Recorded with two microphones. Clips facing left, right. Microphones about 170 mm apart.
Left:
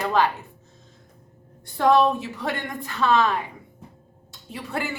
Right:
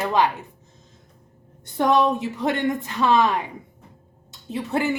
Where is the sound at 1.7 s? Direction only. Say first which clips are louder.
Left 1 dB; 20° right (ahead or behind).